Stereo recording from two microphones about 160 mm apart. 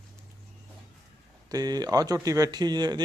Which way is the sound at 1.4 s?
25° right (ahead or behind).